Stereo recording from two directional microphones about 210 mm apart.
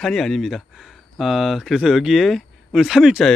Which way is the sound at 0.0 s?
Centre (ahead or behind).